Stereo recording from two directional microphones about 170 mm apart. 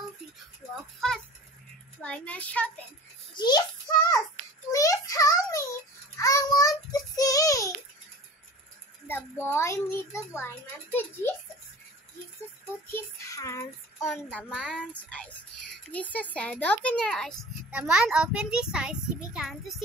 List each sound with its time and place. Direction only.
2.0 s a child's voice: 5° left (ahead or behind)
3.3 s child singing: 25° left (ahead or behind)
4.7 s a sound: 20° left (ahead or behind)
6.1 s child singing: 20° left (ahead or behind)
9.0 s a child's voice: 10° left (ahead or behind)
12.9 s child singing: 20° left (ahead or behind)
14.5 s a child's voice: 5° right (ahead or behind)
14.8 s a child's voice: 10° left (ahead or behind)